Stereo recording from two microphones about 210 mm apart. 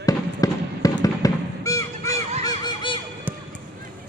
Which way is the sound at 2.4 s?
20° left (ahead or behind).